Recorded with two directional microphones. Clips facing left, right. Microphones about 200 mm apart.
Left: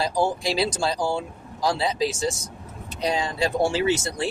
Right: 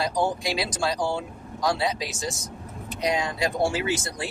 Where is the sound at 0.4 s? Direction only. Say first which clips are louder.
Left 3 dB; 30° left (ahead or behind).